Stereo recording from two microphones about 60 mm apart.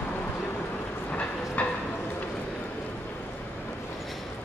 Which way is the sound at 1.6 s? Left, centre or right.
Left.